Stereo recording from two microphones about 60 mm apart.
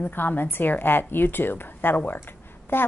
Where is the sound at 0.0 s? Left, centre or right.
Left.